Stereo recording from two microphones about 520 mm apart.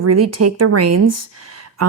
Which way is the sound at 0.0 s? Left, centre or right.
Right.